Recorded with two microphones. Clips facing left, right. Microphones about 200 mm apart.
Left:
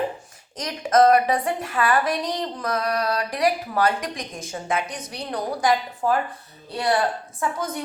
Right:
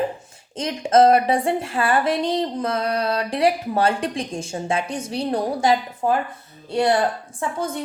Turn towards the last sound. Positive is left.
turn(degrees=-25)  # may be behind; listen again after turning